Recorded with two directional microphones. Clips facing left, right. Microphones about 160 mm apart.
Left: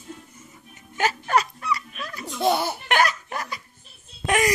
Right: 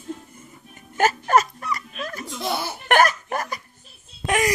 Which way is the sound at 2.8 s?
50° right (ahead or behind).